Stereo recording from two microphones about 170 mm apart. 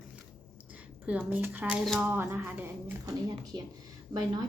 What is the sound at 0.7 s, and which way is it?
Speech, 10° right (ahead or behind).